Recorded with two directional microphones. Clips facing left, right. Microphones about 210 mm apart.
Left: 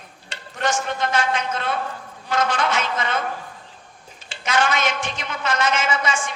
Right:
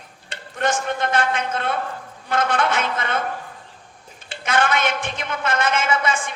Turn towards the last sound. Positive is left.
turn(degrees=-55)  # may be behind; listen again after turning